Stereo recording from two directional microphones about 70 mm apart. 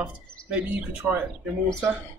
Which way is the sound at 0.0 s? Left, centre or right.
Centre.